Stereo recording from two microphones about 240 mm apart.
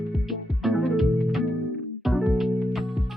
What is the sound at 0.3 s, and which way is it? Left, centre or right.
Music, centre.